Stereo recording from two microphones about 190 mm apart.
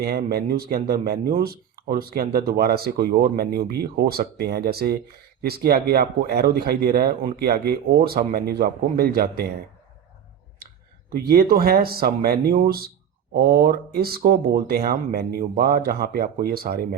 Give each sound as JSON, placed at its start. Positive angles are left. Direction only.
{"t": 0.0, "sound": "speech", "side_deg": -55}
{"t": 11.1, "sound": "speech", "side_deg": -50}